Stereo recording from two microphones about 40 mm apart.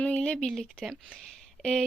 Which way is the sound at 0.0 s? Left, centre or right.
Left.